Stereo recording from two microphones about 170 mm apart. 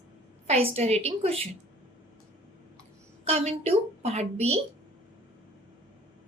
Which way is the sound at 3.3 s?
35° right (ahead or behind).